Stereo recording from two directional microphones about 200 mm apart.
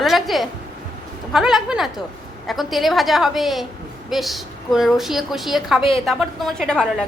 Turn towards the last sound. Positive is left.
turn(degrees=5)  # may be behind; listen again after turning